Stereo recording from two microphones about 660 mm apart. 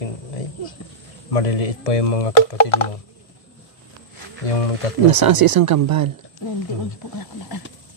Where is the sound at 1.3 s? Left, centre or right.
Left.